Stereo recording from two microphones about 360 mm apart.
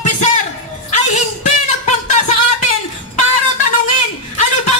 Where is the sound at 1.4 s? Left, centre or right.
Centre.